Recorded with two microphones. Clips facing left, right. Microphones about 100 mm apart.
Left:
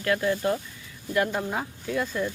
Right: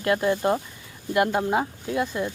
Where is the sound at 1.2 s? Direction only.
20° right (ahead or behind).